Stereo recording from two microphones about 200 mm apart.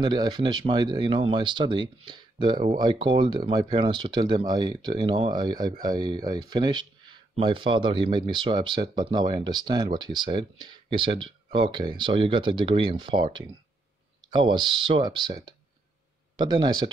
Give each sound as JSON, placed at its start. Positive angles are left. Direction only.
{"t": 0.0, "sound": "speech", "side_deg": -20}